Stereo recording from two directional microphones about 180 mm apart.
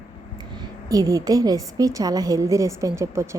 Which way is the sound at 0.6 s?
20° right (ahead or behind).